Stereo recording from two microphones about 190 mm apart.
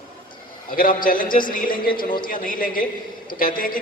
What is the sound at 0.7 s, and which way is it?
A man's voice, 45° left (ahead or behind).